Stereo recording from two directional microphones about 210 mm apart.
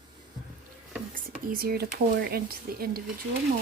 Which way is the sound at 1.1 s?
40° right (ahead or behind).